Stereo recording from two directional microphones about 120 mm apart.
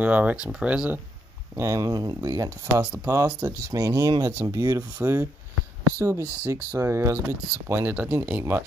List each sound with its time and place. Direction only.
0.0 s speech: 10° right (ahead or behind)
1.6 s speech: 25° right (ahead or behind)
2.8 s speech: 15° right (ahead or behind)